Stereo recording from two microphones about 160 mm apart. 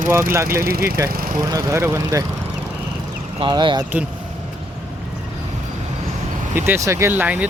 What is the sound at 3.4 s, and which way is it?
Speech, 30° right (ahead or behind).